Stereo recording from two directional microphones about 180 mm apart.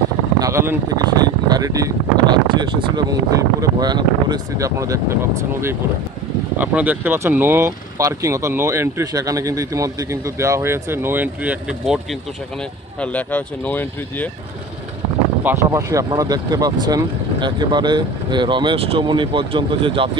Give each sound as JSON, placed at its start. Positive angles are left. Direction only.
{"t": 0.4, "sound": "speech", "side_deg": -15}
{"t": 13.0, "sound": "speech", "side_deg": 10}
{"t": 15.4, "sound": "speech", "side_deg": -15}